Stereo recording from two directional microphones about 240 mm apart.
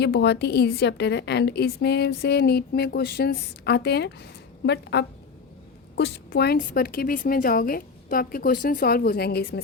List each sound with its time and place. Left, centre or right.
0.0 s a woman's voice: left